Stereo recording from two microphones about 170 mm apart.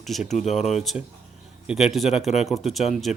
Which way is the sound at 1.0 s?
10° right (ahead or behind).